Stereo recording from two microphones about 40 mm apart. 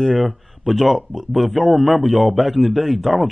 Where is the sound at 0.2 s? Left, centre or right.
Centre.